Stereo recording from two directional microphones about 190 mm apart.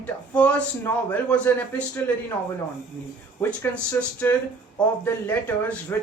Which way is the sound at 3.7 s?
10° left (ahead or behind).